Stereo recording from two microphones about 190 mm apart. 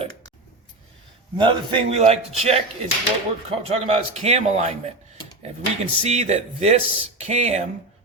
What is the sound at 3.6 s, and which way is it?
Speech, 30° right (ahead or behind).